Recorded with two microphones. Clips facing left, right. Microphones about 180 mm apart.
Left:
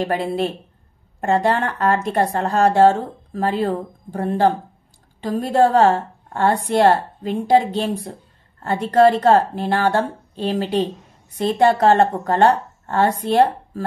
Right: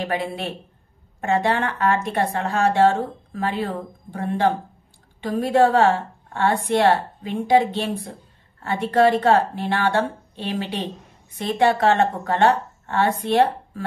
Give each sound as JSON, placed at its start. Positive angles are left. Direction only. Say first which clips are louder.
{"t": 0.0, "sound": "a woman's voice", "louder": "left 5 dB", "side_deg": 45}